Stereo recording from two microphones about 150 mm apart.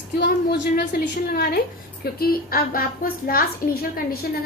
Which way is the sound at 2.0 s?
90° left.